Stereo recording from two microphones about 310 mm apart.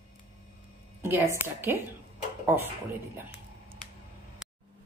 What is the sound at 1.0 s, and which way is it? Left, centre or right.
Speech, centre.